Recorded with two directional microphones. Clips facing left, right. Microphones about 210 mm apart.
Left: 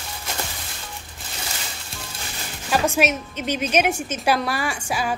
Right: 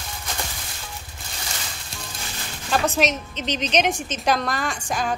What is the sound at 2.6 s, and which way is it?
A woman's voice, 10° left (ahead or behind).